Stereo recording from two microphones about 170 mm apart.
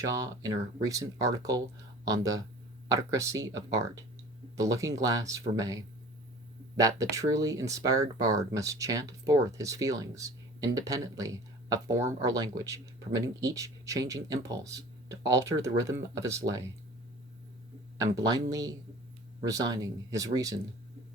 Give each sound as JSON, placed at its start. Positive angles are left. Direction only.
{"t": 0.0, "sound": "speech", "side_deg": -20}
{"t": 18.0, "sound": "speech", "side_deg": -20}